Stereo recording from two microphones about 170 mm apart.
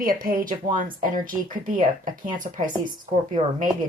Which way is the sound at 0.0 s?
60° right (ahead or behind).